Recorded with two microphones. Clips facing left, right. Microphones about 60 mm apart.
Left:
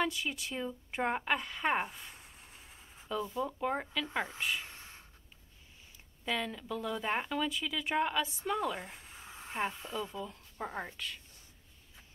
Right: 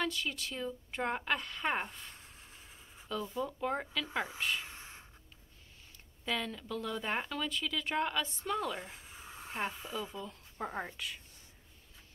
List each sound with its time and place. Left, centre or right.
0.0 s speech: centre
4.6 s a sound: centre
6.2 s speech: centre